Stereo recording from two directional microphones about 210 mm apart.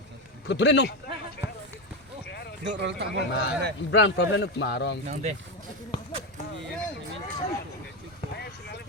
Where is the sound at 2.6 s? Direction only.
55° right (ahead or behind).